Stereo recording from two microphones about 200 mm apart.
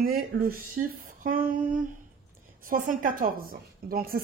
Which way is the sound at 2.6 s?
40° right (ahead or behind).